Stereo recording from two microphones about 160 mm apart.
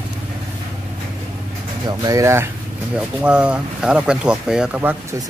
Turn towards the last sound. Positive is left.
turn(degrees=-10)  # may be behind; listen again after turning